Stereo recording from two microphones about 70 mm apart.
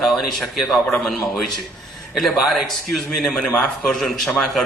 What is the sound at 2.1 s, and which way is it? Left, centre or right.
A man's voice, centre.